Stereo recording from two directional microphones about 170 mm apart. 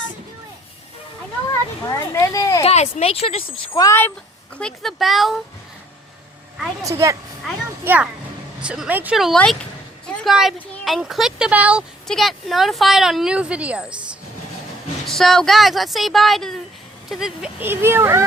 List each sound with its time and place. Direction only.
1.9 s a child's voice: 20° left (ahead or behind)
2.6 s a sound: 40° left (ahead or behind)
3.0 s speech: 35° left (ahead or behind)
3.8 s speech: 15° left (ahead or behind)
4.5 s speech: 5° left (ahead or behind)
6.8 s speech: 20° right (ahead or behind)
15.0 s speech: centre (ahead or behind)